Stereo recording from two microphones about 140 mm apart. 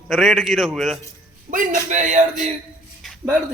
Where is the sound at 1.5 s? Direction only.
70° right (ahead or behind).